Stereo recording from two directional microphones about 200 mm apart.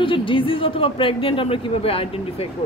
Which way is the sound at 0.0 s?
25° left (ahead or behind).